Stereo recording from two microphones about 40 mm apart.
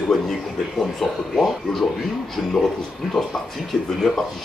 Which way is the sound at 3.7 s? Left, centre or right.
Centre.